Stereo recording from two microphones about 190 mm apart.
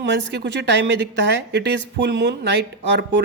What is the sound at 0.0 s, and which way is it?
Speech, 70° right (ahead or behind).